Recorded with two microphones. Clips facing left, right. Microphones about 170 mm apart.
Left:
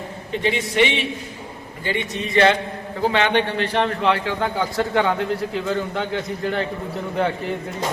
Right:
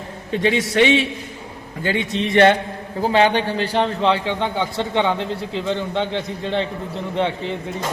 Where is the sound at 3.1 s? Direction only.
35° right (ahead or behind).